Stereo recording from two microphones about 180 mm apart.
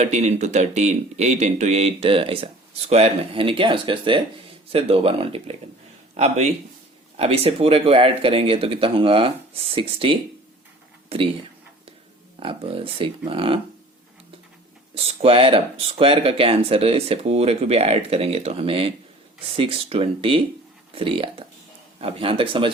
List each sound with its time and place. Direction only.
0.0 s speech: 40° right (ahead or behind)
12.4 s speech: 30° right (ahead or behind)
14.9 s speech: 35° right (ahead or behind)